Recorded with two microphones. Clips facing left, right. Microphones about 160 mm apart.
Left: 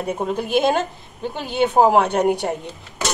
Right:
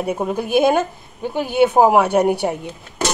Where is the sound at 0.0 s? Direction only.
10° right (ahead or behind).